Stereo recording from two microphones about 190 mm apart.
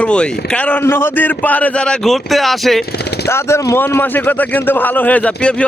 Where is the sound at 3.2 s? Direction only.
15° left (ahead or behind).